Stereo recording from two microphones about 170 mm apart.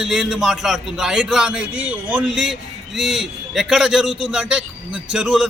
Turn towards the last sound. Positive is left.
turn(degrees=-5)  # may be behind; listen again after turning